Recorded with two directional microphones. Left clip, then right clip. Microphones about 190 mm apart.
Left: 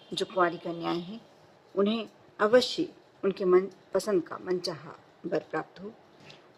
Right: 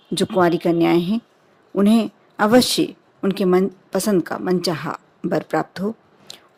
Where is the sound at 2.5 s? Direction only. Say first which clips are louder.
Right 7 dB; 45° right (ahead or behind).